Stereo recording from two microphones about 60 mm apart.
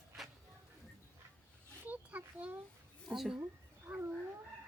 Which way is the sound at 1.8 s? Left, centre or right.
Right.